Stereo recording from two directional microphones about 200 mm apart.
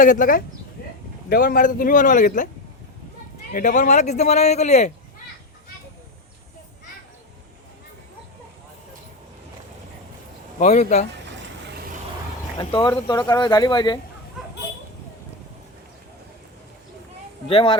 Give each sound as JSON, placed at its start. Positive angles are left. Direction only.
{"t": 0.0, "sound": "a man's voice", "side_deg": 40}
{"t": 0.8, "sound": "a sound", "side_deg": 50}
{"t": 1.3, "sound": "a man's voice", "side_deg": 50}
{"t": 3.5, "sound": "a man's voice", "side_deg": 40}
{"t": 10.6, "sound": "a man's voice", "side_deg": 35}
{"t": 12.5, "sound": "speech", "side_deg": 20}
{"t": 17.5, "sound": "speech", "side_deg": 25}